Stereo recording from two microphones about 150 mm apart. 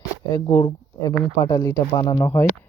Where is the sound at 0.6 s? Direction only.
25° left (ahead or behind).